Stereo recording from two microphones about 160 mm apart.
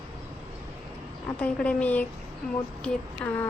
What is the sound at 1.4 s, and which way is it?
Speech, 10° left (ahead or behind).